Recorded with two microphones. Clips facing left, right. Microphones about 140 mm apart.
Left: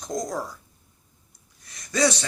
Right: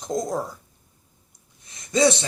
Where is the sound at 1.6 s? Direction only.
25° right (ahead or behind).